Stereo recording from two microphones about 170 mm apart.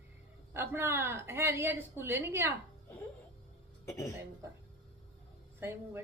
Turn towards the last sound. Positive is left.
turn(degrees=-15)  # may be behind; listen again after turning